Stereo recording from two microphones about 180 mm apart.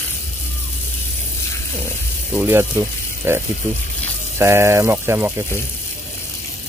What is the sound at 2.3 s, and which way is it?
Speech, 10° right (ahead or behind).